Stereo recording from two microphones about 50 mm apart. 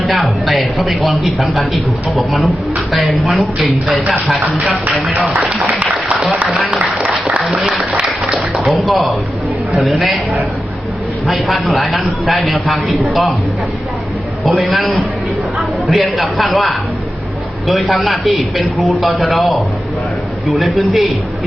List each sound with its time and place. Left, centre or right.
0.0 s a man's voice: centre
5.4 s speech: right
7.5 s speech: right
8.5 s a man's voice: centre
14.6 s a man's voice: centre